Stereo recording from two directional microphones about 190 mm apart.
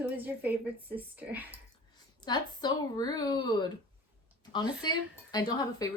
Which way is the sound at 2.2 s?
20° left (ahead or behind).